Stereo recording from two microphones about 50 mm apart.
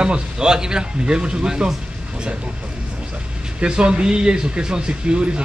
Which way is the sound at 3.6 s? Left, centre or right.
Centre.